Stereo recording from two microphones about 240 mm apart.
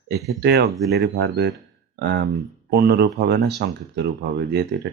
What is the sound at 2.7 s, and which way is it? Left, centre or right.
Speech, right.